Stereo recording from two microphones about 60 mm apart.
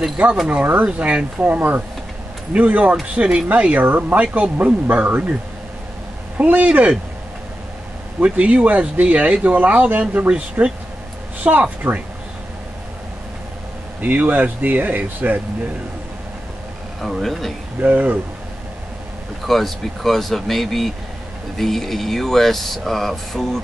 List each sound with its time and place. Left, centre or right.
0.5 s speech: right
6.3 s speech: right
8.2 s speech: right
14.0 s speech: right
17.0 s speech: centre
17.7 s speech: right
19.4 s speech: centre